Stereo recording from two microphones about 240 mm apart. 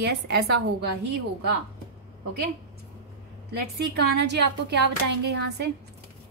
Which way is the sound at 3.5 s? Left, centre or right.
Right.